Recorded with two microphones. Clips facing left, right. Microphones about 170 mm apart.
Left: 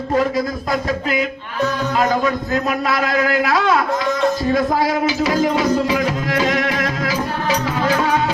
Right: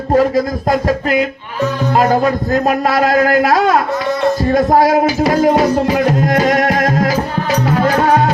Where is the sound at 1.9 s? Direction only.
45° right (ahead or behind).